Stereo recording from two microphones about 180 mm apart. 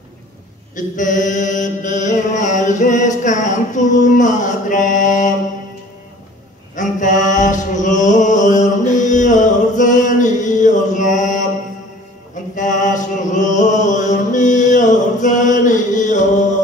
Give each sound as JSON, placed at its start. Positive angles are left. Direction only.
{"t": 0.7, "sound": "chant", "side_deg": 45}
{"t": 6.7, "sound": "mantra", "side_deg": 45}
{"t": 12.5, "sound": "chant", "side_deg": 45}